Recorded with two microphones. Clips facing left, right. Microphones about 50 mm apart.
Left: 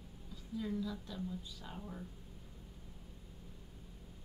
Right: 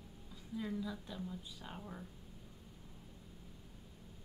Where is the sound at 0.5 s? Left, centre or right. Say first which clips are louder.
Left 2 dB; centre.